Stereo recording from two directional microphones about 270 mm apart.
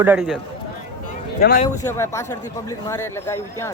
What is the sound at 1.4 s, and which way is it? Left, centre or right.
Speech, left.